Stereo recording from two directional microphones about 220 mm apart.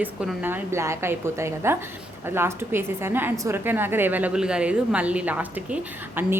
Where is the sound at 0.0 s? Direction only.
5° right (ahead or behind).